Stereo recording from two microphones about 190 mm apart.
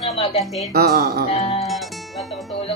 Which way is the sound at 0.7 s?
55° right (ahead or behind).